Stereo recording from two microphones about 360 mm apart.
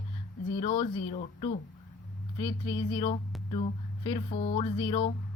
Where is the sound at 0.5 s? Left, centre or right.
Centre.